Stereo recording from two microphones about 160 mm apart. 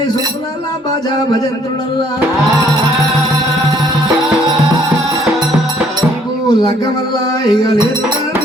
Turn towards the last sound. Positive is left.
turn(degrees=25)  # may be behind; listen again after turning